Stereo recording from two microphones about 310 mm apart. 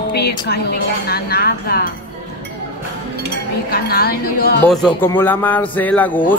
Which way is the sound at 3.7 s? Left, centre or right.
Left.